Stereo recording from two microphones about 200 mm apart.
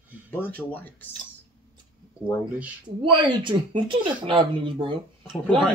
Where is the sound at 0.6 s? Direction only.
10° left (ahead or behind).